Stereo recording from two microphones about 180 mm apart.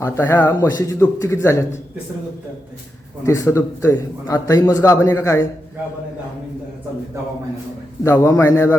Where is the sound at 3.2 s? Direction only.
15° left (ahead or behind).